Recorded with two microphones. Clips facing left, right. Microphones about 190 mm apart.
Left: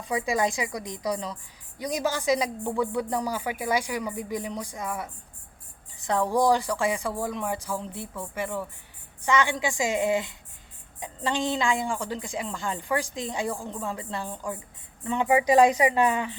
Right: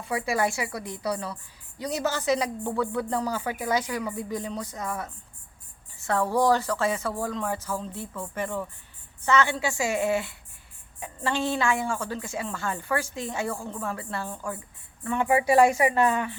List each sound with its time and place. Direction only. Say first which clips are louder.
0.0 s a woman's voice: left 1 dB; 15° left (ahead or behind)